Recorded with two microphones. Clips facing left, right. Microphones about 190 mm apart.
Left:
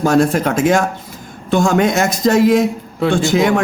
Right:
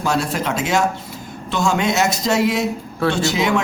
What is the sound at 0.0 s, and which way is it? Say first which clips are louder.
Speech: left 7 dB; 50° left (ahead or behind).